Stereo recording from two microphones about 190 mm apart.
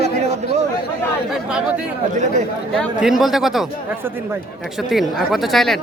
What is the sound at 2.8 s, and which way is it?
Speech, 5° right (ahead or behind).